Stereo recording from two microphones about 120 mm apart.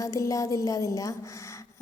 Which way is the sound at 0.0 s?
25° left (ahead or behind).